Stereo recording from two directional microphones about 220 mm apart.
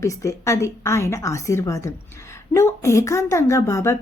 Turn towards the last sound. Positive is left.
turn(degrees=15)  # may be behind; listen again after turning